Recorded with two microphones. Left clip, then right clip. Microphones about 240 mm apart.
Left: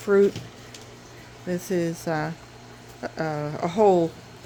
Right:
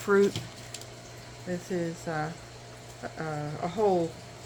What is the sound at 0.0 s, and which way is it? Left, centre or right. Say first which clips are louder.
Speech: left 4 dB; centre.